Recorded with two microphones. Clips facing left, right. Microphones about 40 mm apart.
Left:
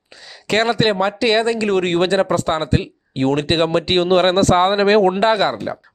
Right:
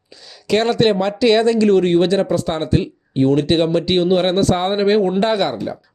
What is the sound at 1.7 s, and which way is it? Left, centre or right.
Speech, left.